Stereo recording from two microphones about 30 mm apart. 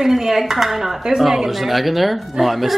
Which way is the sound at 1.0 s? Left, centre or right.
Centre.